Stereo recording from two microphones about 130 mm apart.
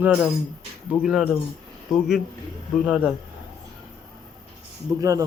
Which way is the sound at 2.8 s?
5° right (ahead or behind).